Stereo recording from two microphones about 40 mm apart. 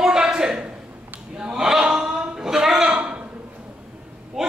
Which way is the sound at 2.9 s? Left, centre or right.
Right.